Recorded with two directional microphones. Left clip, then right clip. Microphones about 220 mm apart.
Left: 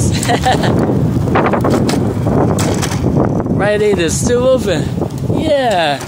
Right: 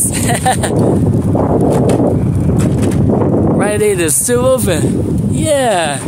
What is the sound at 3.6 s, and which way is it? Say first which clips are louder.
Speech: left 5 dB; 15° right (ahead or behind).